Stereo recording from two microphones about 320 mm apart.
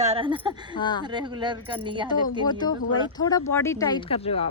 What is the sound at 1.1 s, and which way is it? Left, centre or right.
Speech, centre.